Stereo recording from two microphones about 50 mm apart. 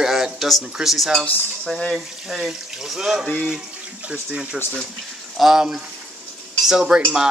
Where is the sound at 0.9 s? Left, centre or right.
Centre.